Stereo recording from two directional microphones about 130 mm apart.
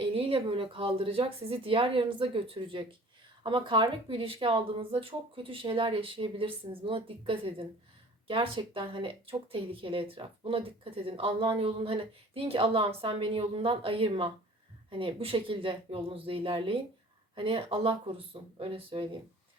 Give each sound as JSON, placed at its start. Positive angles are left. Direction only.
{"t": 0.0, "sound": "speech", "side_deg": -45}